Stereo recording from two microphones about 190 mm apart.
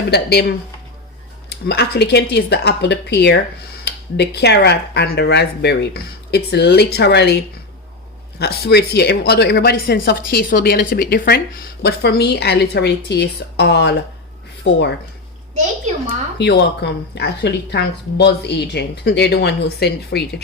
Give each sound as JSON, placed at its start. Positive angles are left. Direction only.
{"t": 0.1, "sound": "speech", "side_deg": 60}
{"t": 1.5, "sound": "speech", "side_deg": 60}
{"t": 8.4, "sound": "speech", "side_deg": 60}
{"t": 16.4, "sound": "speech", "side_deg": 65}